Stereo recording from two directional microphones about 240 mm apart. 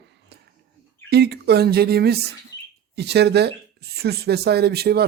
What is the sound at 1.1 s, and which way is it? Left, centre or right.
Speech, right.